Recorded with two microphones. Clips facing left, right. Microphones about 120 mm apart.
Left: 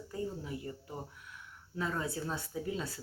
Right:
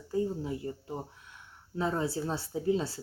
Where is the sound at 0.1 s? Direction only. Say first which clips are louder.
Right 8 dB; 25° right (ahead or behind).